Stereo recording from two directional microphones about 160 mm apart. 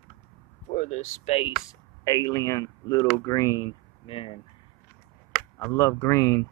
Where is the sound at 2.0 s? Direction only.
20° left (ahead or behind).